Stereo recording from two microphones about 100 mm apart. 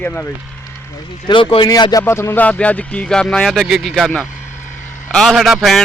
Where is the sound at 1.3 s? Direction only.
55° left (ahead or behind).